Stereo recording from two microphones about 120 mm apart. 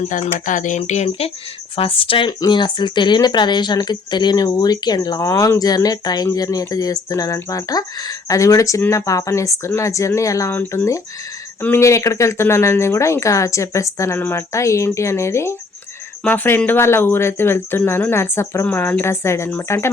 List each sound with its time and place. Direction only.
0.0 s speech: 80° left
1.7 s speech: 50° left (ahead or behind); by 10.5 s 25° left (ahead or behind)
10.5 s speech: 15° left (ahead or behind)